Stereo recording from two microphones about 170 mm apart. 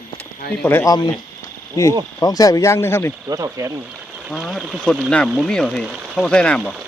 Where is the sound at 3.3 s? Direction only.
20° right (ahead or behind).